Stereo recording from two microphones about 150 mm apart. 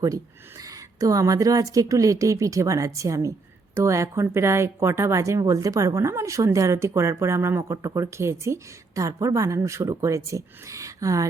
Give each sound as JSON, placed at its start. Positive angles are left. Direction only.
{"t": 0.0, "sound": "a woman's voice", "side_deg": -20}